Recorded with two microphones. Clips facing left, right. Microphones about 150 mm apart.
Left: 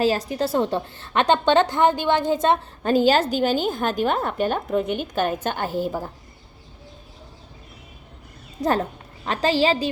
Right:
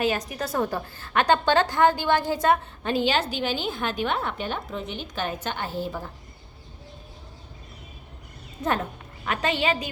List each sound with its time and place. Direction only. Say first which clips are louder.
0.0 s a woman's voice: left 5 dB; 30° left (ahead or behind)
2.8 s a woman's voice: left 8 dB; 40° left (ahead or behind)
8.6 s a woman's voice: left 4 dB; 35° left (ahead or behind)